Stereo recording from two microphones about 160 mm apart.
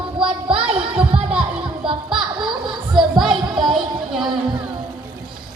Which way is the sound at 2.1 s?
Centre (ahead or behind).